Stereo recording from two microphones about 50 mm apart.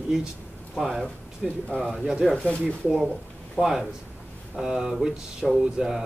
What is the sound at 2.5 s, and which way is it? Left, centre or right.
Speech, left.